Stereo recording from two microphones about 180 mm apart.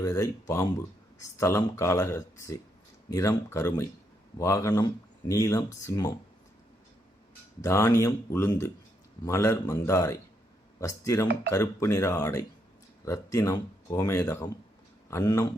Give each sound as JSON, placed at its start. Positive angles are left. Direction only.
{"t": 0.0, "sound": "speech", "side_deg": 15}
{"t": 7.6, "sound": "speech", "side_deg": 15}